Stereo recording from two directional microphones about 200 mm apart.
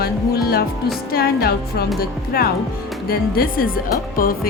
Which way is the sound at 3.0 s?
50° left (ahead or behind).